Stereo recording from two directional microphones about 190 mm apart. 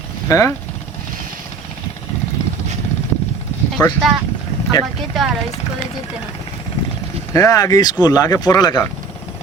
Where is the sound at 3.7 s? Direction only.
Centre (ahead or behind).